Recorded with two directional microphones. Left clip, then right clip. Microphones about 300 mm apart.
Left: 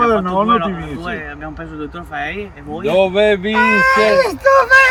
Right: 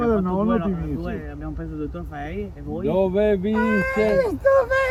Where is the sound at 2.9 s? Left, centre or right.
Centre.